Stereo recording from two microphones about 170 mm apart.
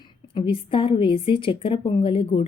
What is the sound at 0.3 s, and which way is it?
A woman's voice, 30° left (ahead or behind).